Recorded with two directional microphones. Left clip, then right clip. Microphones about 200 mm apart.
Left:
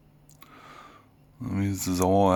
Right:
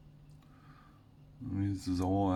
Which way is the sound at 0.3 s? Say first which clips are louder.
Left 15 dB; 50° left (ahead or behind).